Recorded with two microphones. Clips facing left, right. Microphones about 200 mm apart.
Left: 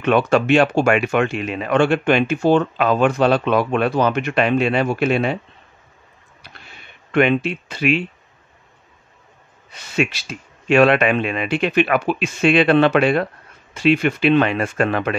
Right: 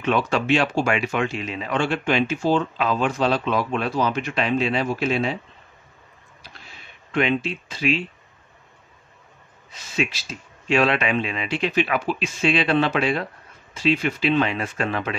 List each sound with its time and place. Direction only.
0.0 s speech: 60° left (ahead or behind)
6.4 s a sound: 60° left (ahead or behind)
9.7 s speech: 65° left (ahead or behind)